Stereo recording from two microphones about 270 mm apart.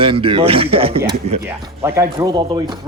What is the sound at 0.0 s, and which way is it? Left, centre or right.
Speech, centre.